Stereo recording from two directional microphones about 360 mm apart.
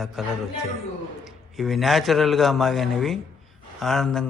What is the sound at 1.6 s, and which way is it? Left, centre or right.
Speech, centre.